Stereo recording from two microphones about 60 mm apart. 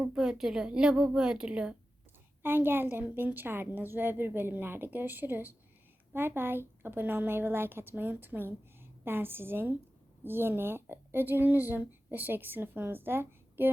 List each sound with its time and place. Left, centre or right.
0.0 s a woman's voice: centre
2.4 s a woman's voice: right